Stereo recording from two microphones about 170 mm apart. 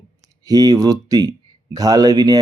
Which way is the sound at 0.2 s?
20° right (ahead or behind).